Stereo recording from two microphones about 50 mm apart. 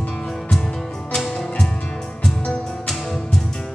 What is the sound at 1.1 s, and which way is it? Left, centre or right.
Music, centre.